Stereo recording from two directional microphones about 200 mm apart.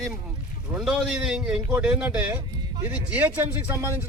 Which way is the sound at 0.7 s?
5° right (ahead or behind).